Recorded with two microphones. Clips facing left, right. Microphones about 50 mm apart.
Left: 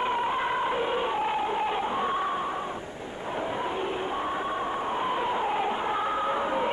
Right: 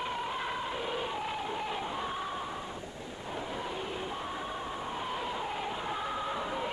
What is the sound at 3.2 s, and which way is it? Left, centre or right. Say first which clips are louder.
Train: left 7 dB; left.